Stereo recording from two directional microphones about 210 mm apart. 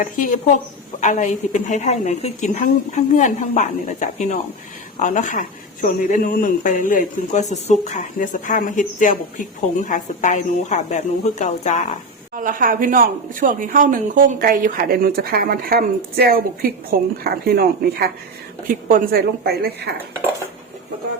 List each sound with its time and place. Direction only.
0.0 s a man's voice: 40° left (ahead or behind)
12.3 s a woman's voice: 40° right (ahead or behind)